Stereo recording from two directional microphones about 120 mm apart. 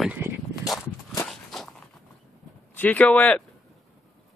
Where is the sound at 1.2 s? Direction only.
Centre (ahead or behind).